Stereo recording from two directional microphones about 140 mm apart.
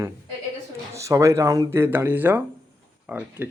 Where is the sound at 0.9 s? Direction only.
20° right (ahead or behind).